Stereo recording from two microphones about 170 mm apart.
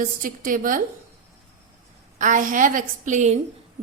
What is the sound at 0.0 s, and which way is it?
Speech, 55° right (ahead or behind).